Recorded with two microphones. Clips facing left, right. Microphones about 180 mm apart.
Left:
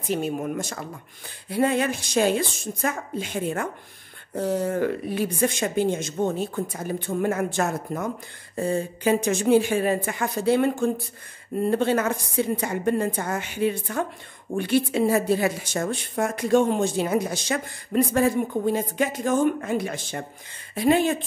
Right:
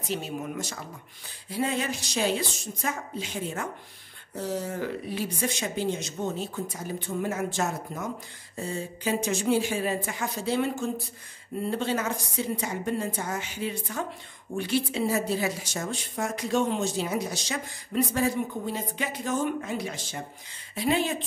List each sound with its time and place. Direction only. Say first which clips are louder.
0.1 s a woman's voice: left 6 dB; 50° left (ahead or behind)